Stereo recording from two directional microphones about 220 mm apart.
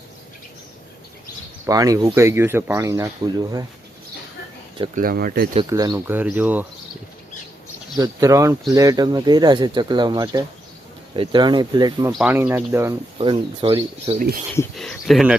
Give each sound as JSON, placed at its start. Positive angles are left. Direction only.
{"t": 1.6, "sound": "speech", "side_deg": -15}
{"t": 4.9, "sound": "speech", "side_deg": -40}
{"t": 5.7, "sound": "speech", "side_deg": -15}
{"t": 7.9, "sound": "speech", "side_deg": -15}
{"t": 12.1, "sound": "speech", "side_deg": -5}
{"t": 13.1, "sound": "speech", "side_deg": -25}
{"t": 14.8, "sound": "speech", "side_deg": 0}